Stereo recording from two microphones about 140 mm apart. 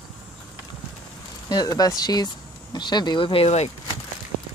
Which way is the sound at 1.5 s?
30° left (ahead or behind).